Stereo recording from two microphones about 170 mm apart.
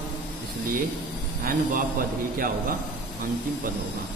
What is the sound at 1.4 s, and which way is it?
A man's voice, 55° right (ahead or behind).